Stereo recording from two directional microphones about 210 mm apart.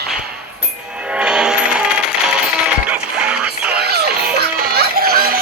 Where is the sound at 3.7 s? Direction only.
50° right (ahead or behind).